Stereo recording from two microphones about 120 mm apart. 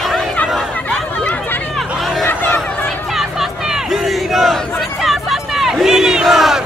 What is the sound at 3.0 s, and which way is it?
Battle cry, centre (ahead or behind).